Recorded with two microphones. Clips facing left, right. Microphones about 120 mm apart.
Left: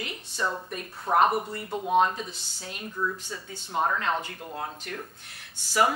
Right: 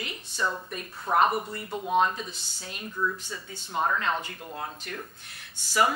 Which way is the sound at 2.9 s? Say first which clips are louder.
Right 1 dB; 35° left (ahead or behind).